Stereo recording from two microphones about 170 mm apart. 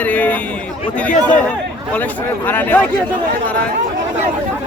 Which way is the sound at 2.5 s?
10° left (ahead or behind).